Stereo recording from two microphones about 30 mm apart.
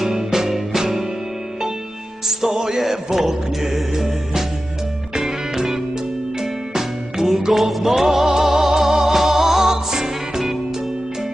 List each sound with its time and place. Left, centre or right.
0.0 s music: centre
2.2 s music: centre
5.1 s music: centre